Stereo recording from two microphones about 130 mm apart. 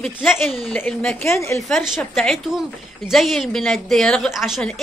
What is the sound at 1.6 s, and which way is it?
A woman's voice, centre (ahead or behind).